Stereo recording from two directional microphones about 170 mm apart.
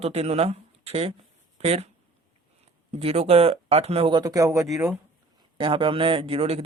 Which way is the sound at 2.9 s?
40° right (ahead or behind).